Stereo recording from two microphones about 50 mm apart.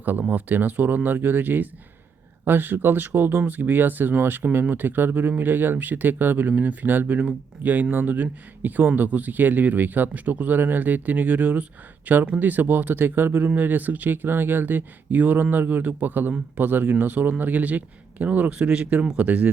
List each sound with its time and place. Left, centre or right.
0.0 s speech: right